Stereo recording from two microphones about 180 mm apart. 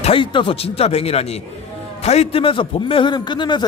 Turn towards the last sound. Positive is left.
turn(degrees=25)  # may be behind; listen again after turning